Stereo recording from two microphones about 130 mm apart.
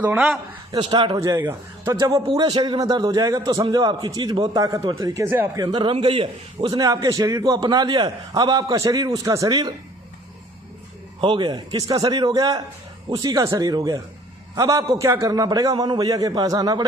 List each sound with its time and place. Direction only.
0.8 s a man's voice: 40° right (ahead or behind); by 5.5 s 20° right (ahead or behind)
5.5 s a man's voice: 35° right (ahead or behind)
6.7 s a man's voice: 25° right (ahead or behind)
11.2 s a man's voice: 40° right (ahead or behind)